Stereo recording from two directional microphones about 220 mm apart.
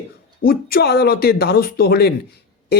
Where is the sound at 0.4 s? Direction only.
45° left (ahead or behind).